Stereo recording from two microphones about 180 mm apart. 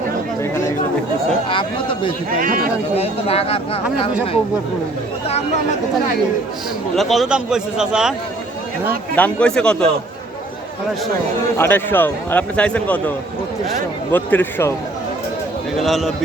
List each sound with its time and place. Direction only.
1.5 s speech: 30° left (ahead or behind)
2.3 s speech: 50° right (ahead or behind)
2.9 s speech: 35° left (ahead or behind)
6.9 s a man's voice: centre (ahead or behind)
9.1 s a man's voice: 5° left (ahead or behind)
11.5 s a man's voice: 10° left (ahead or behind)
15.8 s a man's voice: centre (ahead or behind)